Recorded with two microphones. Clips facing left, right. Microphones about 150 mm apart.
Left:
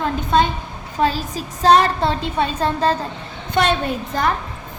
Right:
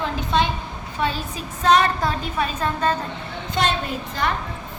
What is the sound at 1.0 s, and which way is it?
A woman's voice, 35° left (ahead or behind).